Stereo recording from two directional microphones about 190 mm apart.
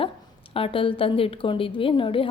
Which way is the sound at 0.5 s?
30° left (ahead or behind).